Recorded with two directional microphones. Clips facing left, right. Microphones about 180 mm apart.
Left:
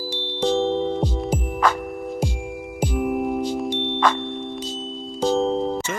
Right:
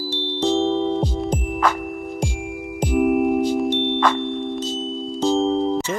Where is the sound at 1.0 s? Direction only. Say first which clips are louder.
Right 1 dB; 10° left (ahead or behind).